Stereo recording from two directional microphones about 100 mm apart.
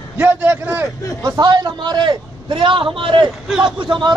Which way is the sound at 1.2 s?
45° right (ahead or behind).